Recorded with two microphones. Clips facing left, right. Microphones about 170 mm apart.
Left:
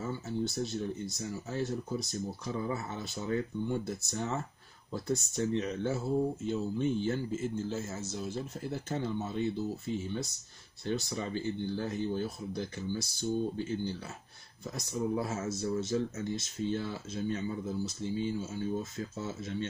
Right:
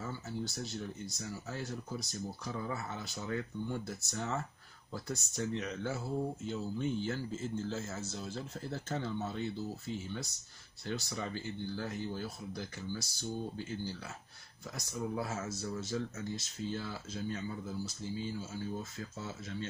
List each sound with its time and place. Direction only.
0.0 s speech: 20° left (ahead or behind)
15.0 s speech: 20° left (ahead or behind)